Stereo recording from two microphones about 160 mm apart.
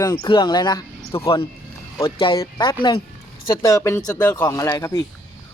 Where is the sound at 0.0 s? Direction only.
25° left (ahead or behind).